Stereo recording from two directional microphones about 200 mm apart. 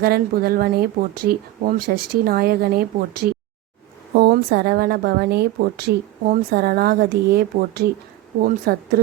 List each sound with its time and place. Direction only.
0.0 s a woman's voice: 50° right (ahead or behind)